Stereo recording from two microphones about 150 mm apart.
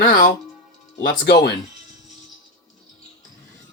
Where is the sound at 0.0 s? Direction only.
60° left (ahead or behind).